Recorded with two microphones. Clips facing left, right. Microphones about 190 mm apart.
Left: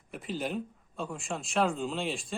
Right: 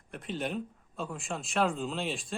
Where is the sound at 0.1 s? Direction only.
Centre (ahead or behind).